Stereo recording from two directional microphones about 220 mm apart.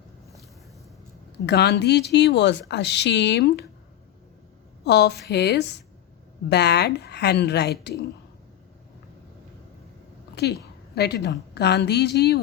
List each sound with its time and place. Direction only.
1.5 s speech: 50° left (ahead or behind)
4.8 s speech: 50° left (ahead or behind)
10.3 s a woman's voice: 50° left (ahead or behind)